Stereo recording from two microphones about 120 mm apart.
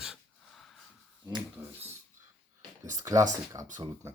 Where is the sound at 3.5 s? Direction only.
30° right (ahead or behind).